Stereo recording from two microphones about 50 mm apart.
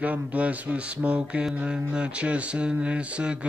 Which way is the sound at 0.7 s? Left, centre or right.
Right.